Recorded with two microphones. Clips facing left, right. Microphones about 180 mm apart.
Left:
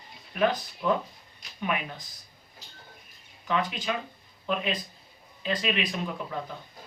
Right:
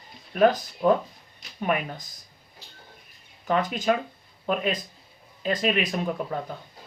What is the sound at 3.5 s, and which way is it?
Speech, 45° right (ahead or behind).